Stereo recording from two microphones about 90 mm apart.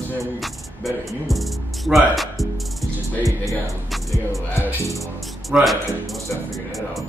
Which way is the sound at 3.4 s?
Centre (ahead or behind).